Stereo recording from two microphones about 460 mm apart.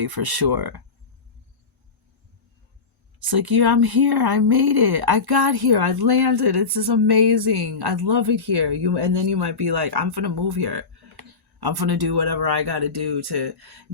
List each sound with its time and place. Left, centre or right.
0.0 s speech: right
3.2 s speech: right